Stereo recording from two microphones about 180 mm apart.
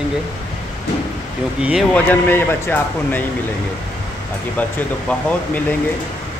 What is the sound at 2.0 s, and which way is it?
Speech, 10° left (ahead or behind).